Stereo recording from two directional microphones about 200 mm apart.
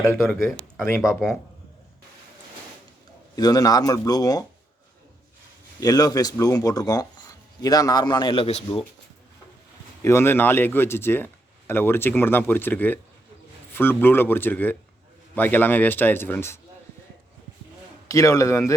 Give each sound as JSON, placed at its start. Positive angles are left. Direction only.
{"t": 0.0, "sound": "speech", "side_deg": 10}
{"t": 3.3, "sound": "speech", "side_deg": 20}
{"t": 5.8, "sound": "speech", "side_deg": 20}
{"t": 10.0, "sound": "speech", "side_deg": 15}
{"t": 18.1, "sound": "speech", "side_deg": 15}